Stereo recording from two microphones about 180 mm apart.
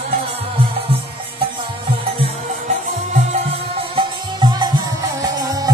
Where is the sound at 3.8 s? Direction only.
25° right (ahead or behind).